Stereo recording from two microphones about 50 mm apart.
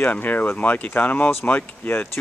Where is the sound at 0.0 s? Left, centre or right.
Left.